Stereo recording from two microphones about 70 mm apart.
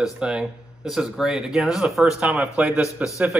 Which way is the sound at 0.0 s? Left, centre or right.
Centre.